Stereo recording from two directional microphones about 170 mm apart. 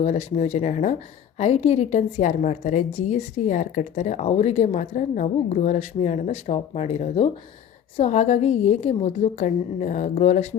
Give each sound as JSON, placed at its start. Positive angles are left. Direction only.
{"t": 0.0, "sound": "a woman's voice", "side_deg": 40}